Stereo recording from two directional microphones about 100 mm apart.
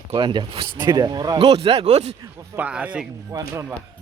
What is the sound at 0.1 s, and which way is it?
Speech, 50° right (ahead or behind).